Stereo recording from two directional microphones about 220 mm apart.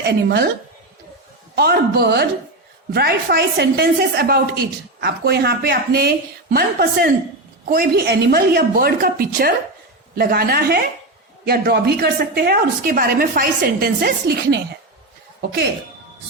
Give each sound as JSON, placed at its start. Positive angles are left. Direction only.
{"t": 0.1, "sound": "a woman's voice", "side_deg": -45}
{"t": 1.5, "sound": "a woman's voice", "side_deg": -45}